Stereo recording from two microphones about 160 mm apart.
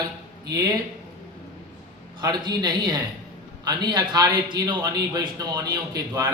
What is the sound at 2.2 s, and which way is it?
A man's voice, 25° right (ahead or behind).